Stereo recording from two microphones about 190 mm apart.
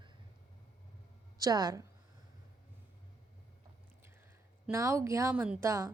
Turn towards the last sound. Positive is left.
turn(degrees=-15)  # may be behind; listen again after turning